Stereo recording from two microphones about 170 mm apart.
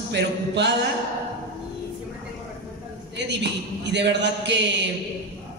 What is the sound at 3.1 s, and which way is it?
A man's voice, 90° right.